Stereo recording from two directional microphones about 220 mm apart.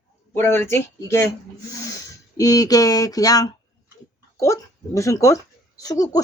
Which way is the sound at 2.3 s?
15° left (ahead or behind).